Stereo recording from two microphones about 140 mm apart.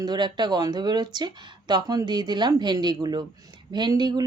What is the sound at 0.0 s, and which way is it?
Speech, 30° right (ahead or behind).